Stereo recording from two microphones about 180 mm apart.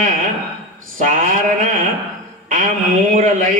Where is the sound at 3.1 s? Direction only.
45° right (ahead or behind).